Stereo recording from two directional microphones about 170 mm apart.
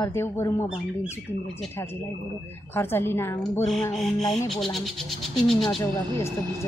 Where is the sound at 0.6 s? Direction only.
5° right (ahead or behind).